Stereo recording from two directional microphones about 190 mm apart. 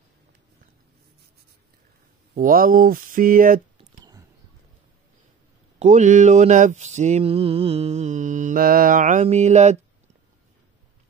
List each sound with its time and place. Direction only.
2.3 s speech: 45° right (ahead or behind)
3.7 s a sound: 20° right (ahead or behind)
5.8 s mantra: 40° right (ahead or behind)